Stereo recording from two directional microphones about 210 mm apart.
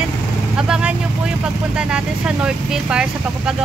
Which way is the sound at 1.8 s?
5° right (ahead or behind).